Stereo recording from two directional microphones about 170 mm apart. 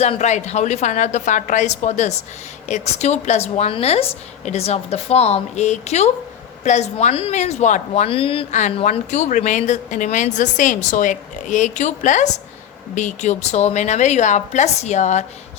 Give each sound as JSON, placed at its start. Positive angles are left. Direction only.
{"t": 0.0, "sound": "a woman's voice", "side_deg": 40}